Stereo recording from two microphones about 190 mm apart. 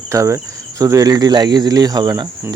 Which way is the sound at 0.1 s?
15° right (ahead or behind).